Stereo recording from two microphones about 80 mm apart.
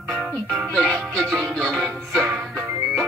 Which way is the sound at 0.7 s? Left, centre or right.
Centre.